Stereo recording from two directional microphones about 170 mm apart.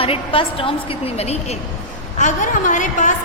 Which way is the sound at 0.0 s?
35° left (ahead or behind).